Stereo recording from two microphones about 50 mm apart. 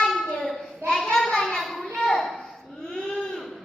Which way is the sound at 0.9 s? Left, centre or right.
Centre.